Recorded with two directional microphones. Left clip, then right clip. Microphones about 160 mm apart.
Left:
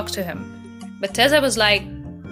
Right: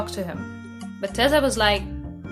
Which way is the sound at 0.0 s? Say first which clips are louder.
Left 3 dB; 20° left (ahead or behind).